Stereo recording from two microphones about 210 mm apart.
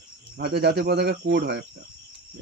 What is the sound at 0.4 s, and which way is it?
Speech, 50° right (ahead or behind).